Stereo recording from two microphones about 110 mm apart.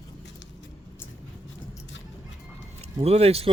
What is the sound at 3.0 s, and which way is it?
Speech, 70° right (ahead or behind).